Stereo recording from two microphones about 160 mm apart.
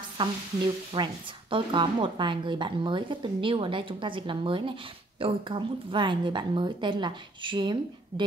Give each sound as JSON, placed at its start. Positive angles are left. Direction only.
{"t": 0.9, "sound": "a woman's voice", "side_deg": -30}